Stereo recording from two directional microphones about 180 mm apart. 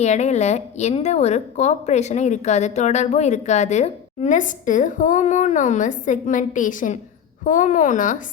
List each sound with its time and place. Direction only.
0.0 s a woman's voice: 40° left (ahead or behind)